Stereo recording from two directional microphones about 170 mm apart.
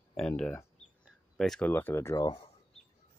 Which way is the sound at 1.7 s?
10° left (ahead or behind).